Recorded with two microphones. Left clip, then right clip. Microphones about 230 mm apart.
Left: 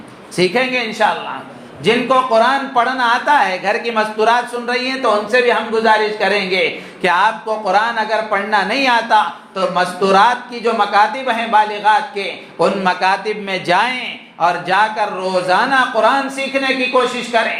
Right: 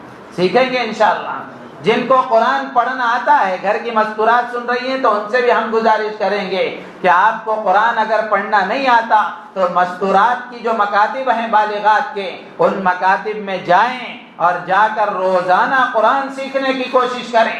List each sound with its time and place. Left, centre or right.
0.3 s speech: left
17.3 s speech: left